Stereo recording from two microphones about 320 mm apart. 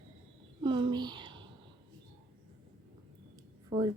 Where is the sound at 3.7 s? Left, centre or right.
Centre.